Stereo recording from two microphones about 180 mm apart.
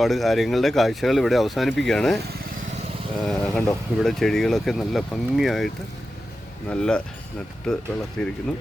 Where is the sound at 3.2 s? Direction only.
5° left (ahead or behind).